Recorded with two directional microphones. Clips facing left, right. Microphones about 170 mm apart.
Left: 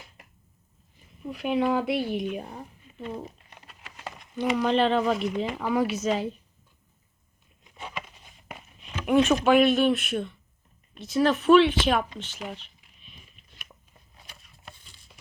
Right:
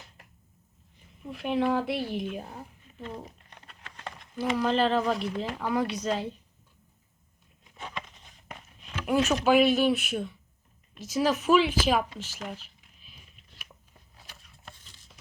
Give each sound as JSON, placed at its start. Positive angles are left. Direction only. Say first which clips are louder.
{"t": 1.3, "sound": "a woman's voice", "louder": "left 2 dB", "side_deg": 0}
{"t": 7.6, "sound": "a sound", "louder": "left 1 dB", "side_deg": 5}
{"t": 9.0, "sound": "speech", "louder": "left 3 dB", "side_deg": 0}
{"t": 14.2, "sound": "patter", "louder": "left 1 dB", "side_deg": 0}